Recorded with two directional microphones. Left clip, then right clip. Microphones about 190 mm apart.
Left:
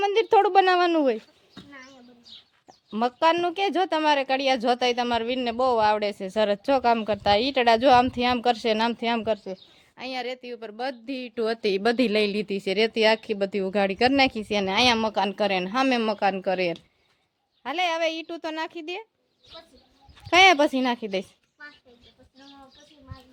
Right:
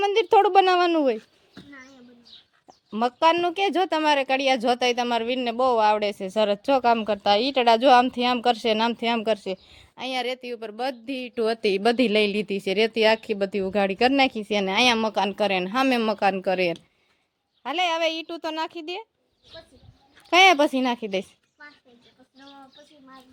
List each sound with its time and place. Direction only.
0.0 s a sound: centre (ahead or behind)
2.6 s speech: centre (ahead or behind)
9.3 s a woman's voice: 20° right (ahead or behind); by 19.0 s 5° right (ahead or behind)
20.3 s speech: centre (ahead or behind)